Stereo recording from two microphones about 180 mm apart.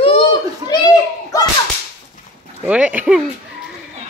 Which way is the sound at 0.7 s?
20° left (ahead or behind).